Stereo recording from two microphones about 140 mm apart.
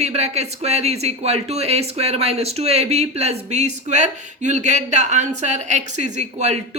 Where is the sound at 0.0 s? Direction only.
50° right (ahead or behind).